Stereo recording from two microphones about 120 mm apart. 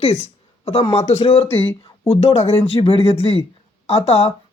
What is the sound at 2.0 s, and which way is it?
Speech, 55° left (ahead or behind).